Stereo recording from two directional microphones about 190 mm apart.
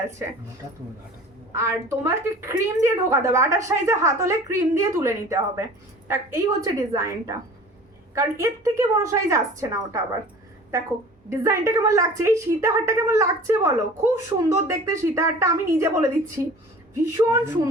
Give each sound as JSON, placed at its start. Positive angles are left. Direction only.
{"t": 1.5, "sound": "a woman's voice", "side_deg": -15}
{"t": 11.3, "sound": "a woman's voice", "side_deg": -15}